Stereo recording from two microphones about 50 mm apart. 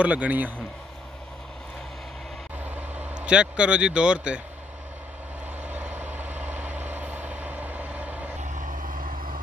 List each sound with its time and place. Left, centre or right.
0.0 s speech: right
2.7 s vehicle: right
3.2 s speech: right
5.6 s vehicle: right